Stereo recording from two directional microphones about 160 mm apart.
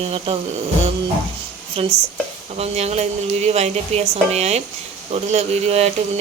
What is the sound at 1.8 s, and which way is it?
A woman's voice, 35° right (ahead or behind).